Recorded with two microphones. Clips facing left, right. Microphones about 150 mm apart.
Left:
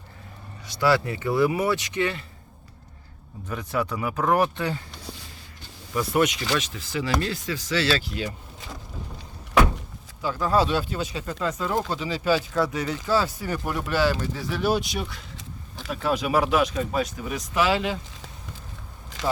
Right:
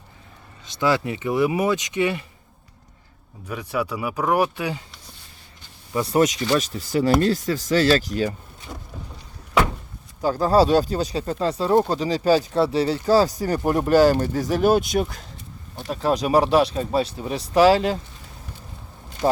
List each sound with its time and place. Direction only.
0.6 s speech: 20° right (ahead or behind)
3.5 s speech: 10° right (ahead or behind)
5.9 s speech: 30° right (ahead or behind)
10.2 s speech: 40° right (ahead or behind)
19.2 s speech: 90° left